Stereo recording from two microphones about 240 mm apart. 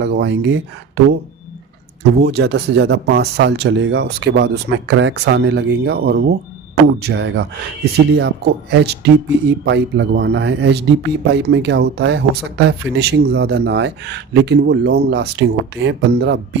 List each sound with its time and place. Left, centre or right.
0.0 s a man's voice: right
2.2 s a man's voice: right